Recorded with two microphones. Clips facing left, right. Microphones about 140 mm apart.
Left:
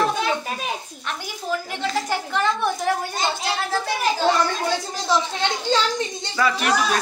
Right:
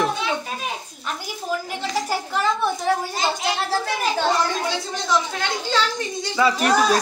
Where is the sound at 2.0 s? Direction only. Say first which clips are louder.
Right 1 dB; 5° right (ahead or behind).